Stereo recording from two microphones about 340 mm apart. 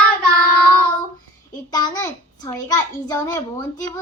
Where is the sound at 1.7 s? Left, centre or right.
Centre.